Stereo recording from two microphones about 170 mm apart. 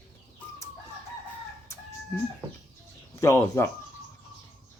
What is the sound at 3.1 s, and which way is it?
Speech, 15° left (ahead or behind).